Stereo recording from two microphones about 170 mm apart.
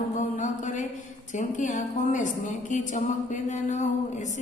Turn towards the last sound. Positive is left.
turn(degrees=45)  # may be behind; listen again after turning